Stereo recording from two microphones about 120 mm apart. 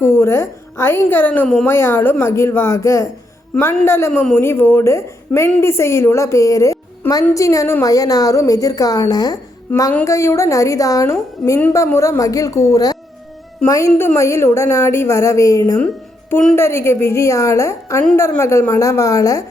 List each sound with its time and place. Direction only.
0.0 s a woman's voice: 20° left (ahead or behind)
1.6 s a woman's voice: 20° left (ahead or behind)